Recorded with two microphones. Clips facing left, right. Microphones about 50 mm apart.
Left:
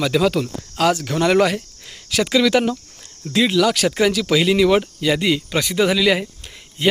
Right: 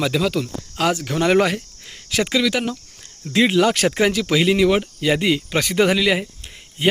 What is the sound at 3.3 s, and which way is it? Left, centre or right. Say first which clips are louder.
Speech: even; right.